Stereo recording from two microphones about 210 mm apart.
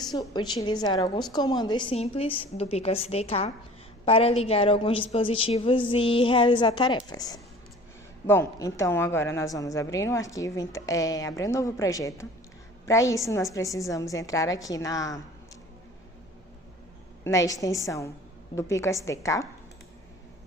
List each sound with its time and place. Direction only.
0.0 s a woman's voice: 20° left (ahead or behind)
17.2 s a woman's voice: 15° left (ahead or behind)